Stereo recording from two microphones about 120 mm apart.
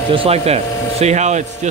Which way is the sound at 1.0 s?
70° right (ahead or behind).